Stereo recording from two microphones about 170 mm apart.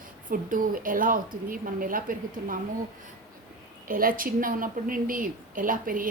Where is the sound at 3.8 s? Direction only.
55° right (ahead or behind).